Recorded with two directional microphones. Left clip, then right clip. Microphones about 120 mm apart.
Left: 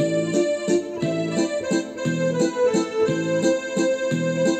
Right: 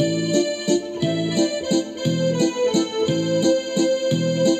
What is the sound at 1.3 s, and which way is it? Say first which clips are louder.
Music: right 2 dB; 45° right (ahead or behind).